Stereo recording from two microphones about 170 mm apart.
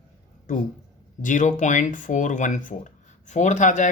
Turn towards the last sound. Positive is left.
turn(degrees=45)  # may be behind; listen again after turning